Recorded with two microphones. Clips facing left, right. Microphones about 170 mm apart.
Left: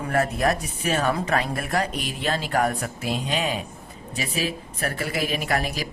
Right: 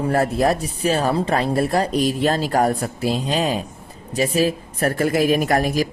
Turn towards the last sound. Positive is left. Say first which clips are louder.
# right 7 dB
turn(degrees=-45)  # may be behind; listen again after turning